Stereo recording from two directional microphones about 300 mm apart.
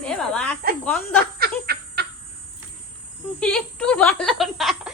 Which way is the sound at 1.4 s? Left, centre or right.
Right.